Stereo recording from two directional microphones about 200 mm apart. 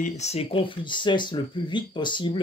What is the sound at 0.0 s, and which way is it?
Speech, 35° left (ahead or behind).